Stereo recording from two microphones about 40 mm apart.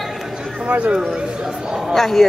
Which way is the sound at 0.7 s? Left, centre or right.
Right.